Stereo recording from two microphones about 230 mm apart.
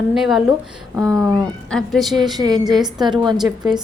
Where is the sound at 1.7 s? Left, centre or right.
Centre.